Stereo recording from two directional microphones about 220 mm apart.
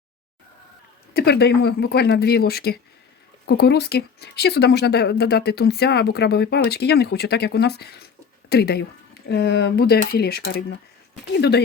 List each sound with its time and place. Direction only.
1.1 s speech: 45° left (ahead or behind)